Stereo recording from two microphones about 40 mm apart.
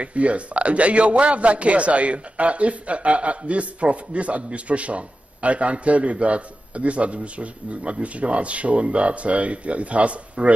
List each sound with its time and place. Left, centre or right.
0.0 s a man's voice: right